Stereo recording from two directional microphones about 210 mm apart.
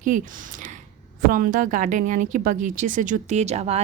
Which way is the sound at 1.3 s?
40° right (ahead or behind).